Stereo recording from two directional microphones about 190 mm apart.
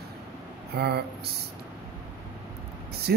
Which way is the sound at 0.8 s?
60° right (ahead or behind).